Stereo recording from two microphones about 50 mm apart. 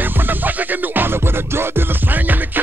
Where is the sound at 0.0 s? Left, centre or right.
Right.